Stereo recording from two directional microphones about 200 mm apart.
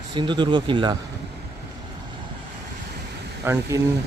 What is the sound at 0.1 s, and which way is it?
Speech, 25° right (ahead or behind).